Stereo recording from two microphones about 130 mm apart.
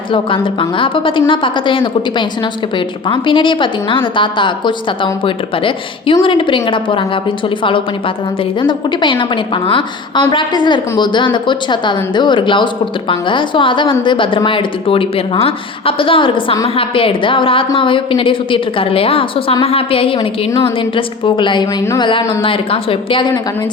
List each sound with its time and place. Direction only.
0.6 s a woman's voice: 40° left (ahead or behind)